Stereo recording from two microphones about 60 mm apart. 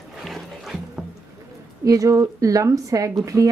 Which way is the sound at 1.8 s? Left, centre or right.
Right.